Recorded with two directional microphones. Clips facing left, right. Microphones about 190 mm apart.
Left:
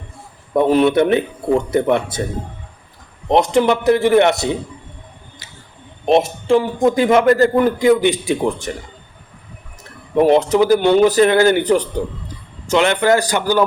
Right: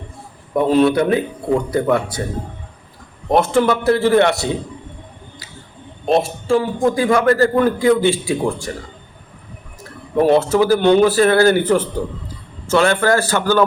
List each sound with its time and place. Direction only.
0.5 s a man's voice: 20° left (ahead or behind)
3.2 s a man's voice: 20° left (ahead or behind)
6.1 s a man's voice: 20° left (ahead or behind)
10.2 s a man's voice: 15° left (ahead or behind)